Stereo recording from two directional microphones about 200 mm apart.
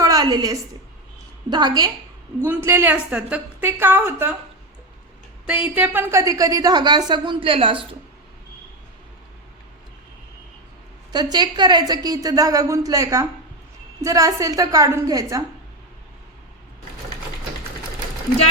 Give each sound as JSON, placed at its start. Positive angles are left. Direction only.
{"t": 0.0, "sound": "a sound", "side_deg": -20}
{"t": 1.5, "sound": "a woman's voice", "side_deg": -20}
{"t": 5.5, "sound": "a woman's voice", "side_deg": -10}
{"t": 11.1, "sound": "a woman's voice", "side_deg": -20}